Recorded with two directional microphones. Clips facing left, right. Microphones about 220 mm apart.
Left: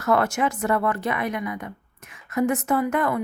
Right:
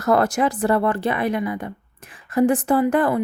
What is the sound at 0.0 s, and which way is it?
Speech, 35° right (ahead or behind).